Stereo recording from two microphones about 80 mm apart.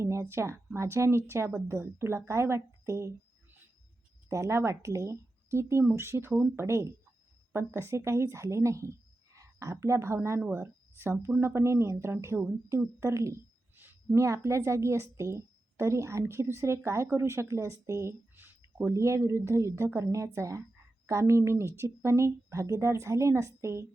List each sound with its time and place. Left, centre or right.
0.0 s a woman's voice: right
4.3 s a woman's voice: right
18.9 s a woman's voice: right